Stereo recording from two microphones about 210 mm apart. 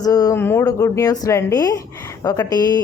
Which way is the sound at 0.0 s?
15° left (ahead or behind).